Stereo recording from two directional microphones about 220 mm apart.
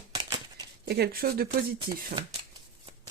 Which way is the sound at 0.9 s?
45° right (ahead or behind).